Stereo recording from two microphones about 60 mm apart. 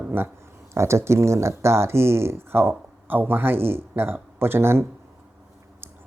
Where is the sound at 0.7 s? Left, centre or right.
Right.